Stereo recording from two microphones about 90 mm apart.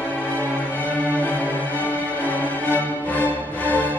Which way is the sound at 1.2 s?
20° left (ahead or behind).